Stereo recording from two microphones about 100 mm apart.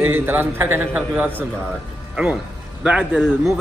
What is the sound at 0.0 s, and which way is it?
A man's voice, 20° right (ahead or behind).